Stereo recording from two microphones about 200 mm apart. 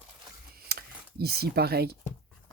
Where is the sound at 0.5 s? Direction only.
50° right (ahead or behind).